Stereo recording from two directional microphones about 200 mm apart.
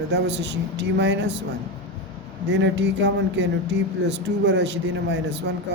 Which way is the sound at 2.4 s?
60° right (ahead or behind).